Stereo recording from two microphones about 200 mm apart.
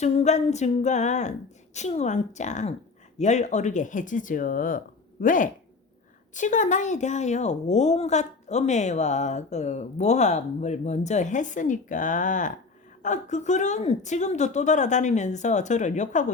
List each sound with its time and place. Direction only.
0.0 s a woman's voice: 35° left (ahead or behind)